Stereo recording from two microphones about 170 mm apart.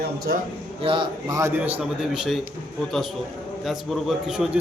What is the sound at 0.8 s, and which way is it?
A man's voice, 30° right (ahead or behind).